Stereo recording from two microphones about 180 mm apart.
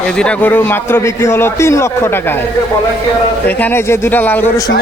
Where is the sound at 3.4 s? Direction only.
10° left (ahead or behind).